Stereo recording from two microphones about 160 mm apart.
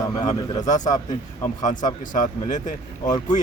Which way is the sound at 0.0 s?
25° left (ahead or behind).